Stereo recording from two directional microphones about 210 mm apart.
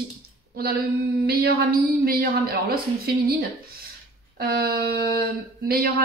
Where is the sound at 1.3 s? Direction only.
45° right (ahead or behind).